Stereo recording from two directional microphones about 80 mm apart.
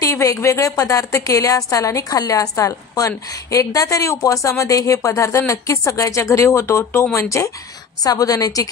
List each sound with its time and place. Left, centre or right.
0.0 s a woman's voice: left
8.0 s a woman's voice: left